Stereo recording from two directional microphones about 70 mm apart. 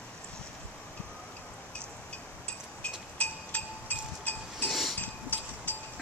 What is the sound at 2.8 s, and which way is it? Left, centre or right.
Music, centre.